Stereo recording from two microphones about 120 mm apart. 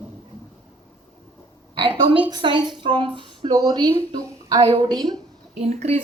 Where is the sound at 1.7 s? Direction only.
45° right (ahead or behind).